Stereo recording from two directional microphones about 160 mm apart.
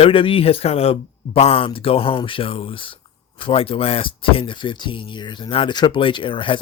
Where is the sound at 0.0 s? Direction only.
35° left (ahead or behind).